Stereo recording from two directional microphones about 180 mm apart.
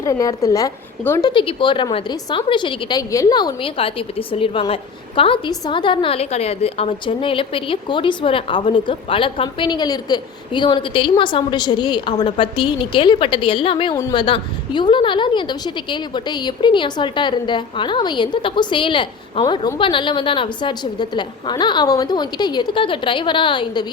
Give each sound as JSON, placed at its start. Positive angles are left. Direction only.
{"t": 0.0, "sound": "a woman's voice", "side_deg": 20}
{"t": 1.3, "sound": "a woman's voice", "side_deg": 30}